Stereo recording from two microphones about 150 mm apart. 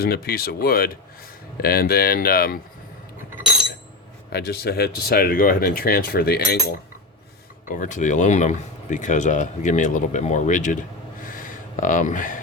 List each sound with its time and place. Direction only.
0.0 s speech: 90° left
4.3 s speech: 90° left
7.7 s speech: 55° left (ahead or behind)
11.2 s a sound: 65° left (ahead or behind)